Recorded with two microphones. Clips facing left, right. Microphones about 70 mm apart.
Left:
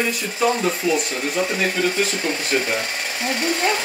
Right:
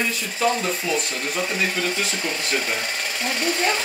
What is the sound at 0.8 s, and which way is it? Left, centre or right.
Speech, centre.